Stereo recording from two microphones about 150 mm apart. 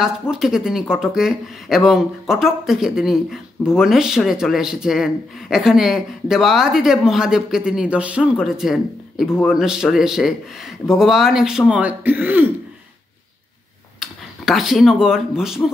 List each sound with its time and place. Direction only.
0.0 s speech: 5° right (ahead or behind)
13.9 s speech: centre (ahead or behind)